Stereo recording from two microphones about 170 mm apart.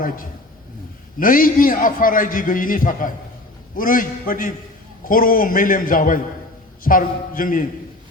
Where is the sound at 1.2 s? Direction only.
55° left (ahead or behind).